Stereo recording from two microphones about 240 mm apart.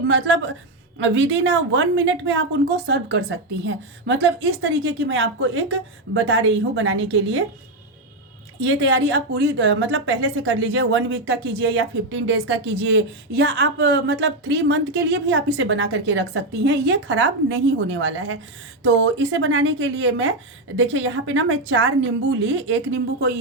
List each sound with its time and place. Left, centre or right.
0.1 s a woman's voice: right
8.6 s a woman's voice: right